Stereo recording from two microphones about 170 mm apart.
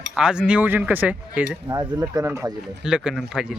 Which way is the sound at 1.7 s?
20° right (ahead or behind).